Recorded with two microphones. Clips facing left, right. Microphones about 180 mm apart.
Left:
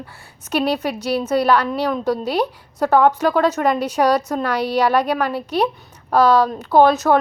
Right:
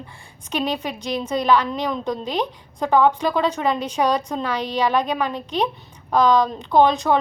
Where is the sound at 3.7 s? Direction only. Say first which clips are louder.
Left 4 dB; 10° left (ahead or behind).